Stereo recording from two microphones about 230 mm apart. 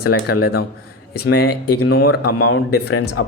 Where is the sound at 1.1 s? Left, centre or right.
Left.